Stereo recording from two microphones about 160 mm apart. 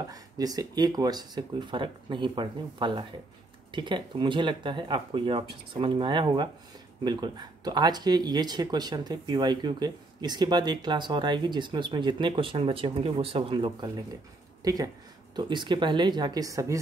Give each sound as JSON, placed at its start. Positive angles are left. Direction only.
{"t": 0.1, "sound": "speech", "side_deg": -25}